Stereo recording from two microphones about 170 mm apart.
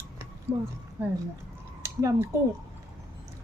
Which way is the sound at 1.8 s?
20° right (ahead or behind).